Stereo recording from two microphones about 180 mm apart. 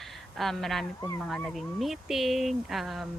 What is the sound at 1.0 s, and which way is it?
Speech, 15° left (ahead or behind).